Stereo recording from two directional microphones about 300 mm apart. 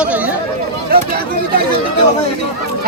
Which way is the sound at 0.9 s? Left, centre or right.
Right.